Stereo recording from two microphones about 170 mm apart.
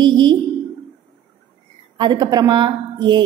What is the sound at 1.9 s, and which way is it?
A woman's voice, 25° right (ahead or behind).